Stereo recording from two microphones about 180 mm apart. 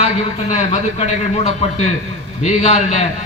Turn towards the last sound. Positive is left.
turn(degrees=40)  # may be behind; listen again after turning